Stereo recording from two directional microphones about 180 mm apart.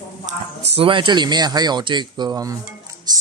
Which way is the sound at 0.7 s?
30° right (ahead or behind).